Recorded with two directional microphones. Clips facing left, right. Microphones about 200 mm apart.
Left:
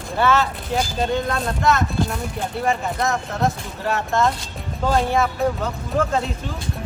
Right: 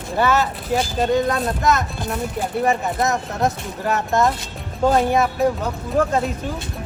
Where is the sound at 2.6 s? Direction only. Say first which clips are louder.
Right 2 dB; 20° right (ahead or behind).